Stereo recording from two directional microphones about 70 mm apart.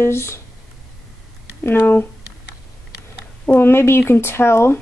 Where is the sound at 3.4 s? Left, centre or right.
Left.